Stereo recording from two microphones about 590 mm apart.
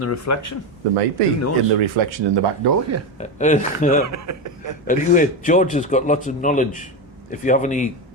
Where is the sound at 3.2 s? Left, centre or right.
Centre.